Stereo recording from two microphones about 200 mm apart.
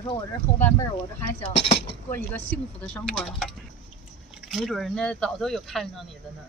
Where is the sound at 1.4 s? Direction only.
30° left (ahead or behind).